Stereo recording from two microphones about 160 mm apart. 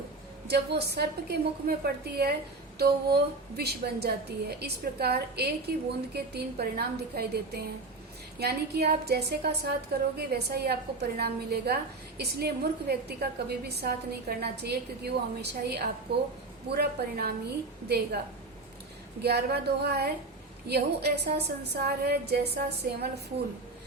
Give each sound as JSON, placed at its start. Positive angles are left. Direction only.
{"t": 0.4, "sound": "a woman's voice", "side_deg": -90}
{"t": 8.4, "sound": "a woman's voice", "side_deg": -90}
{"t": 19.2, "sound": "a woman's voice", "side_deg": -90}